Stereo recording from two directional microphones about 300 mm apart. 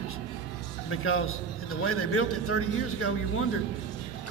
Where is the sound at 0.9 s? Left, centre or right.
Left.